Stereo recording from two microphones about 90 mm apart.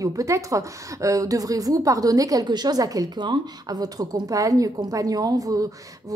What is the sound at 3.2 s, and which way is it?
A woman's voice, 55° right (ahead or behind).